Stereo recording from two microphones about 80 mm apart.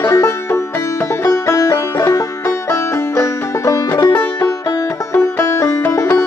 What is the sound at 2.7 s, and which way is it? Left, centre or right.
Music, left.